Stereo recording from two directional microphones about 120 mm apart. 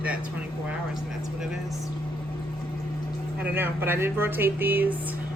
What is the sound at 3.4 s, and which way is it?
A woman's voice, 15° right (ahead or behind).